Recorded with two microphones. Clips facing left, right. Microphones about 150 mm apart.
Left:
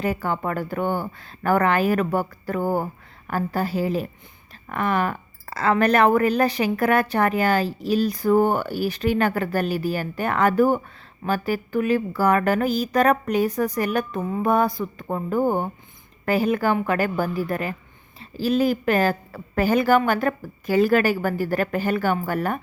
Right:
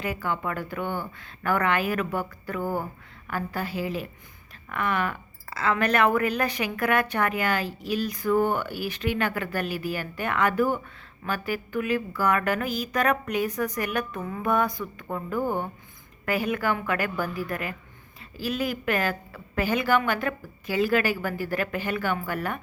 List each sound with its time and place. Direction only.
0.0 s speech: 40° left (ahead or behind)